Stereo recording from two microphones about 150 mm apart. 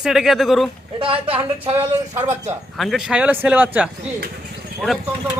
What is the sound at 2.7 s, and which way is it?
A man's voice, centre (ahead or behind).